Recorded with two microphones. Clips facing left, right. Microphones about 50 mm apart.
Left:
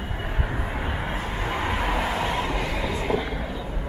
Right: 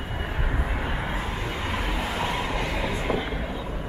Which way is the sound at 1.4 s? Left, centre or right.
Centre.